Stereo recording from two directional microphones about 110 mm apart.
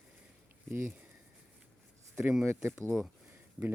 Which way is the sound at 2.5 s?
25° right (ahead or behind).